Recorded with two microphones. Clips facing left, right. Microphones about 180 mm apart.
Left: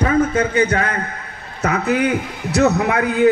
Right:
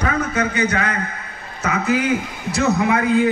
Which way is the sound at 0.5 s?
50° left (ahead or behind).